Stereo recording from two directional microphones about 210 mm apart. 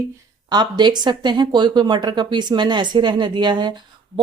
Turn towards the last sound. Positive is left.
turn(degrees=-20)  # may be behind; listen again after turning